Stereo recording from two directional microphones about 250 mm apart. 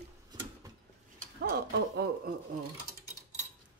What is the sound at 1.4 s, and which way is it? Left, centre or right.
Speech, right.